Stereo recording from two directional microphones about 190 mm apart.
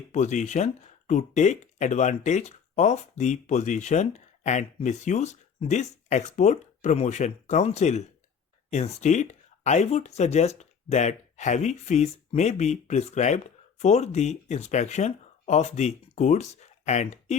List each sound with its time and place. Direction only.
0.1 s speech: 40° left (ahead or behind)